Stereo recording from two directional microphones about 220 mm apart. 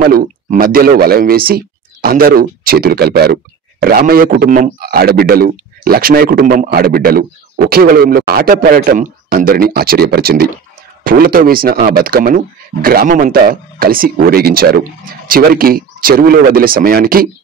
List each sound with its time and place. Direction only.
0.0 s a man's voice: 40° right (ahead or behind)